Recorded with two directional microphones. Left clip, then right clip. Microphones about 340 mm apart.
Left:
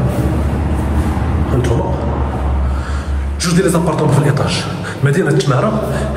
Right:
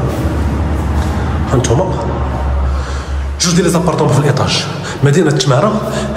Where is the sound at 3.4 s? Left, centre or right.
Centre.